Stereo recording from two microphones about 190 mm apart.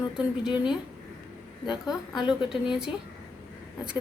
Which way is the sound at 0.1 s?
5° right (ahead or behind).